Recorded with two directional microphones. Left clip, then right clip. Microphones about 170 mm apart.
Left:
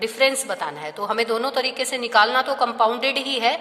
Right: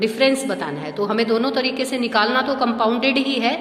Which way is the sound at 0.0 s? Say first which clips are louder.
Right 2 dB; 35° left (ahead or behind).